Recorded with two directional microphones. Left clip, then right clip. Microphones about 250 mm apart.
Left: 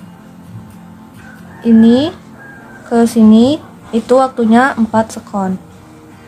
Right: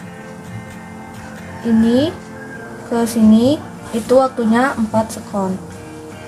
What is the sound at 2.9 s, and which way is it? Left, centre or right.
Speech, left.